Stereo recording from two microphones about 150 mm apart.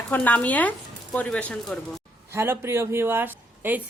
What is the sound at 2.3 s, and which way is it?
Speech, 15° right (ahead or behind).